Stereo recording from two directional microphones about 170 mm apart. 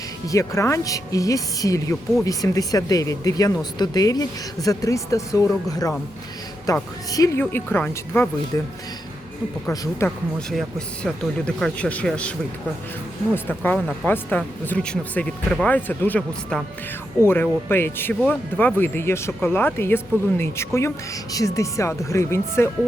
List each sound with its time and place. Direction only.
0.3 s speech: 20° left (ahead or behind)
9.6 s speech: 15° left (ahead or behind)
10.5 s speech: 5° left (ahead or behind)
13.3 s speech: 10° left (ahead or behind)